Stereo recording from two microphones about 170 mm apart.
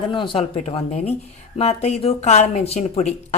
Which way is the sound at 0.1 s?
30° left (ahead or behind).